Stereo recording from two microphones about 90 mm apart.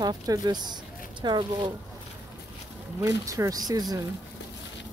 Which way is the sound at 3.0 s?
40° right (ahead or behind).